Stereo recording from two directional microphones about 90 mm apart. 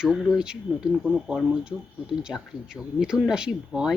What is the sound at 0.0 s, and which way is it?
Speech, 5° right (ahead or behind).